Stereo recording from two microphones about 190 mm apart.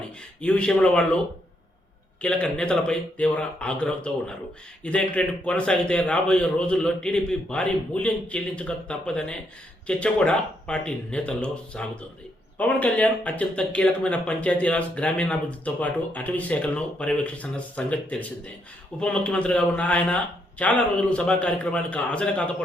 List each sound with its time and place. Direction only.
0.4 s speech: 5° left (ahead or behind)
2.2 s a man's voice: 5° left (ahead or behind)